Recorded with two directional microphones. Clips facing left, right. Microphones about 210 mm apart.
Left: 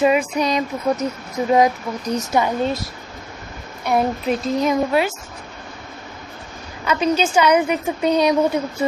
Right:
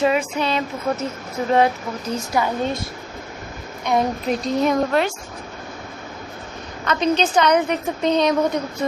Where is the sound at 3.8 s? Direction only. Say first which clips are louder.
Left 1 dB; 5° left (ahead or behind).